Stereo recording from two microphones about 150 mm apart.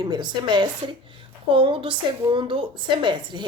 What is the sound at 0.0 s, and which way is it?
A woman's voice, 30° right (ahead or behind).